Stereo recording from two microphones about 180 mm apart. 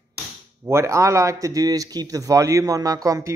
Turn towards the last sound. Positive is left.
turn(degrees=-20)  # may be behind; listen again after turning